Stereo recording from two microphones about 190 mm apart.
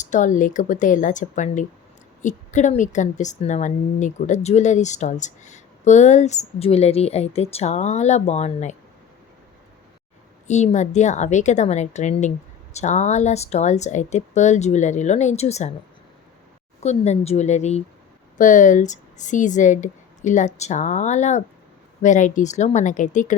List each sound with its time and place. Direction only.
0.0 s a woman's voice: 40° left (ahead or behind)
10.4 s a woman's voice: 35° left (ahead or behind)
16.8 s a woman's voice: 35° left (ahead or behind)